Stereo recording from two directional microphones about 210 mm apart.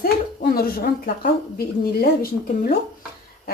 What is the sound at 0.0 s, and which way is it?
Speech, 45° left (ahead or behind).